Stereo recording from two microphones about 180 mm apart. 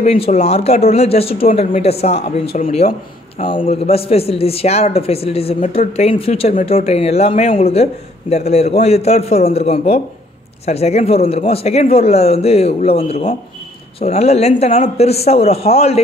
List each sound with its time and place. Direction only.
0.0 s speech: 35° left (ahead or behind)